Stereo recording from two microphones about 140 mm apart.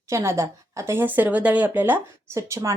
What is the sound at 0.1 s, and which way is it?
A woman's voice, 20° right (ahead or behind).